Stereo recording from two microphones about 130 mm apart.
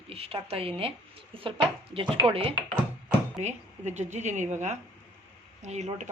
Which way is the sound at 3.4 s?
60° right (ahead or behind).